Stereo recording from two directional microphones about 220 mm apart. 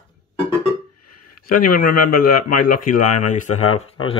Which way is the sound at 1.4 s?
40° left (ahead or behind).